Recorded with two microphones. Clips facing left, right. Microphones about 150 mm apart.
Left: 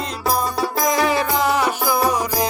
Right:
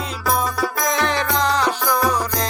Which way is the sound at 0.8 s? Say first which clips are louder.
Left 4 dB; 5° left (ahead or behind).